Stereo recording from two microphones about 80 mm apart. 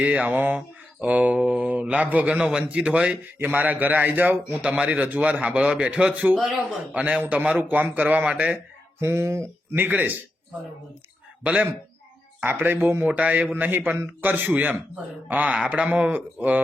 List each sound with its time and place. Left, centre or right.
0.0 s a man's voice: centre
9.0 s a man's voice: right
11.4 s a man's voice: centre